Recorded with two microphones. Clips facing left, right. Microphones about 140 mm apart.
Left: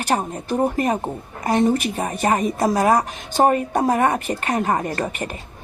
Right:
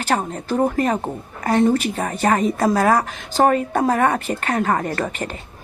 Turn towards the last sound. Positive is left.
turn(degrees=15)  # may be behind; listen again after turning